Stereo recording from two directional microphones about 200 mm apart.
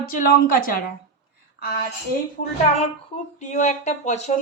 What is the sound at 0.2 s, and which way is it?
Speech, 45° left (ahead or behind).